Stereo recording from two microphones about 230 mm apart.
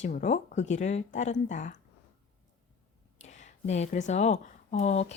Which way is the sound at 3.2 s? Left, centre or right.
Left.